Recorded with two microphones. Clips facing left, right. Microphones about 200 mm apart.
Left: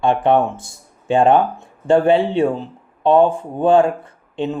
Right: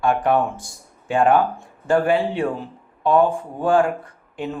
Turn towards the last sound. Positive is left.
turn(degrees=25)  # may be behind; listen again after turning